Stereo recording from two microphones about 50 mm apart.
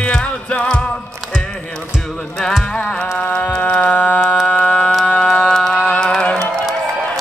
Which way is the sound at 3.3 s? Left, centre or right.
Left.